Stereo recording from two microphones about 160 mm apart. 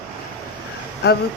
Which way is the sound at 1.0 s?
90° left.